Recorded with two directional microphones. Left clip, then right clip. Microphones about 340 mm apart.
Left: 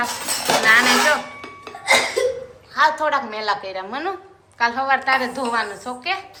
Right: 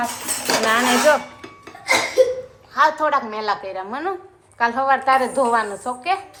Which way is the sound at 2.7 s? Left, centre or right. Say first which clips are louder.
Right 1 dB; centre.